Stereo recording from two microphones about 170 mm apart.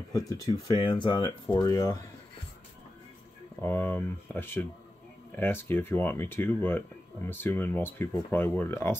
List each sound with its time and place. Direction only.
0.1 s speech: 20° left (ahead or behind)
3.6 s speech: 10° left (ahead or behind)